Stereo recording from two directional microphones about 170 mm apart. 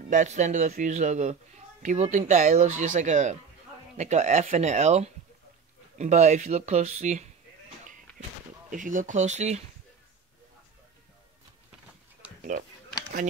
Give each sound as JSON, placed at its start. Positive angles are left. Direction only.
{"t": 0.1, "sound": "speech", "side_deg": -45}
{"t": 8.6, "sound": "speech", "side_deg": -50}